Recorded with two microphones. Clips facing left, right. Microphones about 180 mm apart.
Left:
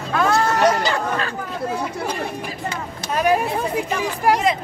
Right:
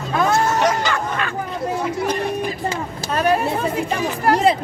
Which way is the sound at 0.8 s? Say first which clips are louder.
Left 1 dB; 35° left (ahead or behind).